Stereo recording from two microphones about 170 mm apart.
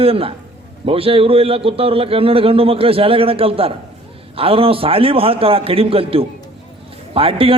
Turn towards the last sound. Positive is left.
turn(degrees=-35)  # may be behind; listen again after turning